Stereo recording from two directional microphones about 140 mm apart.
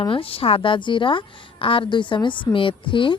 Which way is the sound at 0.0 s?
40° left (ahead or behind).